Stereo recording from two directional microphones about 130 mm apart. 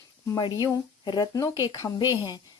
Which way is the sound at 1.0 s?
35° left (ahead or behind).